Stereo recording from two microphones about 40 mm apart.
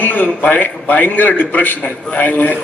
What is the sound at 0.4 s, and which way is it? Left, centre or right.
A man's voice, left.